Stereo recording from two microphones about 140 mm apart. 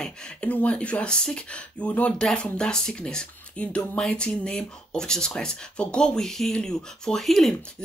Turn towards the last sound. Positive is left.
turn(degrees=0)  # may be behind; listen again after turning